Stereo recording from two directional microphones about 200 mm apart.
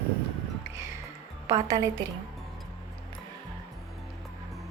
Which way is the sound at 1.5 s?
15° right (ahead or behind).